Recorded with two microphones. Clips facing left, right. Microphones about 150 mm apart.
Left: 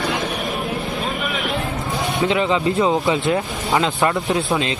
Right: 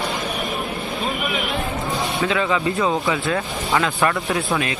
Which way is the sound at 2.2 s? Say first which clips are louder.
Left 3 dB; 20° left (ahead or behind).